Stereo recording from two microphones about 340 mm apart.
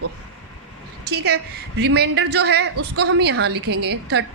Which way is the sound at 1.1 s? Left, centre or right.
Right.